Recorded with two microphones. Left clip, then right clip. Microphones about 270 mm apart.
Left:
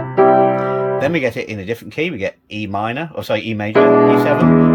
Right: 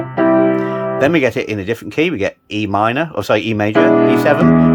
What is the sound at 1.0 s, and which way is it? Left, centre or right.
Speech, centre.